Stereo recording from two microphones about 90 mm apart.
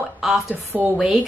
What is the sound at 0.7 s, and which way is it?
Speech, 15° right (ahead or behind).